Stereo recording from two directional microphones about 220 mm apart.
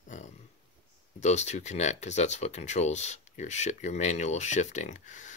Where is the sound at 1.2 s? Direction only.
30° left (ahead or behind).